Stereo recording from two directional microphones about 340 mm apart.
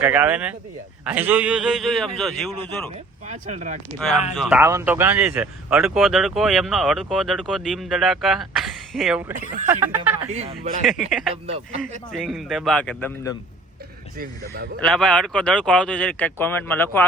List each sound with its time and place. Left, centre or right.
0.0 s speech: centre
3.2 s speech: right
4.4 s speech: centre
10.2 s speech: centre
10.8 s speech: centre
14.2 s speech: right
14.8 s speech: centre